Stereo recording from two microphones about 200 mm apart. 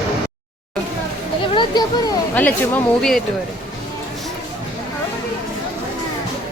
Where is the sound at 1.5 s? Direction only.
20° left (ahead or behind).